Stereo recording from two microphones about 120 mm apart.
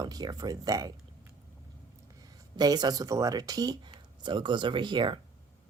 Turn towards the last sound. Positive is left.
turn(degrees=-40)  # may be behind; listen again after turning